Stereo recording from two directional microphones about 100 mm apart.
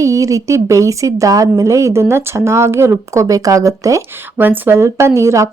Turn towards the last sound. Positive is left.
turn(degrees=-30)  # may be behind; listen again after turning